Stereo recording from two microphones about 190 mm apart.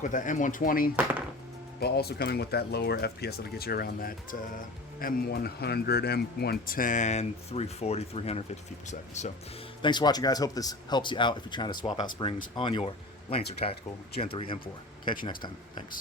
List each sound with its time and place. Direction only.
0.0 s speech: 45° left (ahead or behind)
1.8 s speech: 55° left (ahead or behind); by 9.3 s 40° left (ahead or behind)
9.8 s speech: 20° left (ahead or behind)
13.6 s speech: 35° left (ahead or behind)